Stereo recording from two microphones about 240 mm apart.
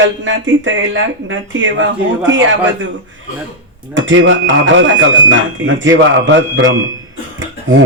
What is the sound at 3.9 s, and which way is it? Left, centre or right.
Speech, right.